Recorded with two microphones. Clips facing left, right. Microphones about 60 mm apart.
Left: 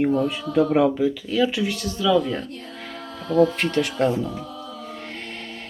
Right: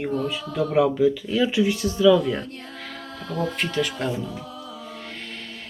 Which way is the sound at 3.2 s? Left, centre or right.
Left.